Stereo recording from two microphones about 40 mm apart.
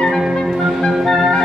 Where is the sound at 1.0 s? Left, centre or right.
Centre.